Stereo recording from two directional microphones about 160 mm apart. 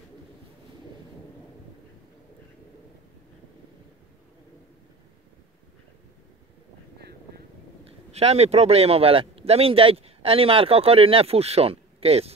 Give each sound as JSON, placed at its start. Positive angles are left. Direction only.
{"t": 8.1, "sound": "speech", "side_deg": -40}